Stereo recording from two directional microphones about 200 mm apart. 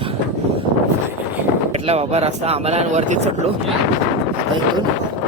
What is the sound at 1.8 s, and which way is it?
Speech, 30° right (ahead or behind).